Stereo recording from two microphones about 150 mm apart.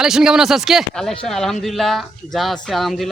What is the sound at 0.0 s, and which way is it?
Speech, 5° right (ahead or behind).